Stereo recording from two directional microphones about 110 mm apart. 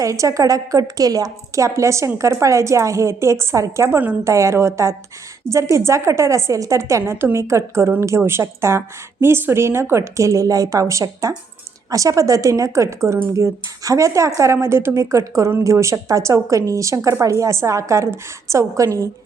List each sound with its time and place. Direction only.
0.0 s a woman's voice: 30° right (ahead or behind)